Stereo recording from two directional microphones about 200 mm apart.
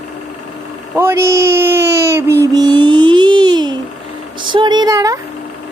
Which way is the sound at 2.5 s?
20° right (ahead or behind).